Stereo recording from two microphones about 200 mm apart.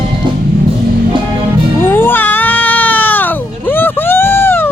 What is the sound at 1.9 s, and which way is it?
Cat, 10° left (ahead or behind).